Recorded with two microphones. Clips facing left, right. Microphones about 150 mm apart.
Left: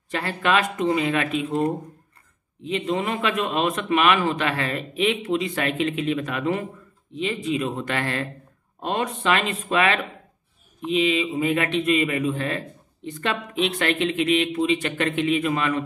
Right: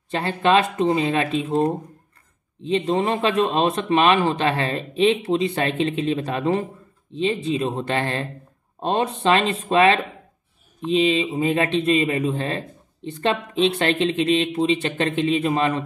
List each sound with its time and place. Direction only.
0.1 s a man's voice: 25° right (ahead or behind)